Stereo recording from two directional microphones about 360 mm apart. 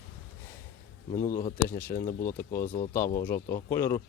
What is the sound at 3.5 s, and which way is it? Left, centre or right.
Speech, centre.